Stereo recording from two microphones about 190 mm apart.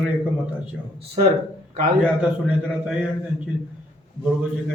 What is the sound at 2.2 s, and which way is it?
Speech, 5° right (ahead or behind).